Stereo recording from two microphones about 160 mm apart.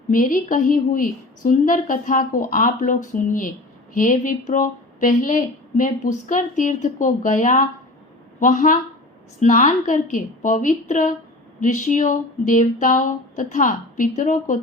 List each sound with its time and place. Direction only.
0.1 s speech: 60° left (ahead or behind)